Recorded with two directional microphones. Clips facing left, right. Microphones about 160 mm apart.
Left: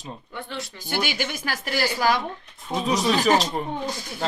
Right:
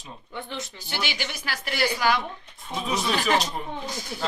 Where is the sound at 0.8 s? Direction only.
50° left (ahead or behind).